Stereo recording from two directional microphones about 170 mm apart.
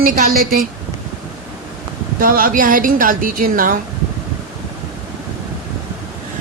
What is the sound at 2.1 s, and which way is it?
Speech, 55° right (ahead or behind).